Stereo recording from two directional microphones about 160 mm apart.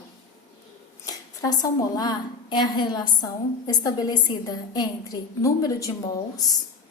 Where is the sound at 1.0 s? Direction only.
25° left (ahead or behind).